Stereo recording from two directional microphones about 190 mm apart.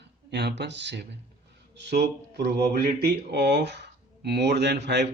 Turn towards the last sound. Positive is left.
turn(degrees=-60)  # may be behind; listen again after turning